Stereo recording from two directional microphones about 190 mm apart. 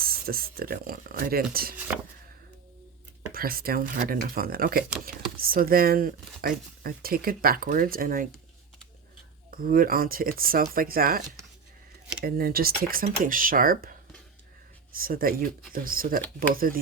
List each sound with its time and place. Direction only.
0.0 s speech: 50° right (ahead or behind)
1.7 s speech: 10° right (ahead or behind)
3.3 s speech: 50° right (ahead or behind)
9.5 s speech: 50° right (ahead or behind)
12.2 s speech: 50° right (ahead or behind)
14.9 s speech: 50° right (ahead or behind)